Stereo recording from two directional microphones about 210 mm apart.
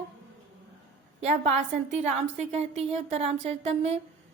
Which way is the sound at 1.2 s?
35° right (ahead or behind).